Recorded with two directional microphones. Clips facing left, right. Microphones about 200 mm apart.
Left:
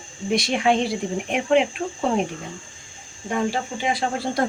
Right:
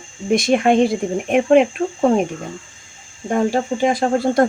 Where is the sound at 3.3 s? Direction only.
45° right (ahead or behind).